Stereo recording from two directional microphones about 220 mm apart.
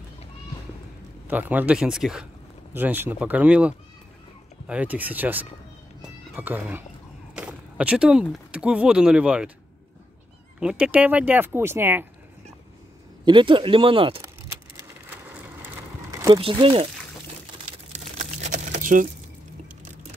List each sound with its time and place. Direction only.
1.2 s speech: 10° right (ahead or behind)
10.6 s speech: 5° right (ahead or behind)
13.2 s speech: 20° right (ahead or behind)
14.8 s a sound: 10° right (ahead or behind)
16.3 s speech: 25° right (ahead or behind)
17.9 s crumpling: 35° right (ahead or behind)